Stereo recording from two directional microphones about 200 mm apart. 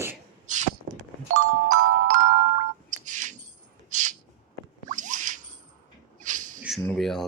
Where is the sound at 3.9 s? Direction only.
40° right (ahead or behind).